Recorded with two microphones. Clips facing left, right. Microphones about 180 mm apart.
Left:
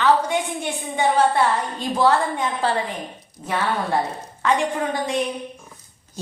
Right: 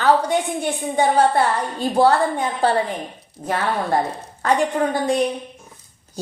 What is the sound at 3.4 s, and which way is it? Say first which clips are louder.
Speech: right 4 dB; 55° right (ahead or behind).